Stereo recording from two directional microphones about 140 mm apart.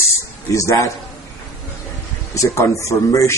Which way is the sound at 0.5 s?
20° left (ahead or behind).